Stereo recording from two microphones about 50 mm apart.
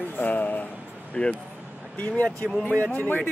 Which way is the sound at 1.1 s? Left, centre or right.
Left.